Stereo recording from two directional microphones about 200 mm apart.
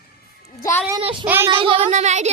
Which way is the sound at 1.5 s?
25° right (ahead or behind).